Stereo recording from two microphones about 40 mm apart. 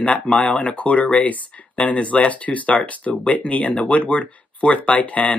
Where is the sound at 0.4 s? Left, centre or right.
Left.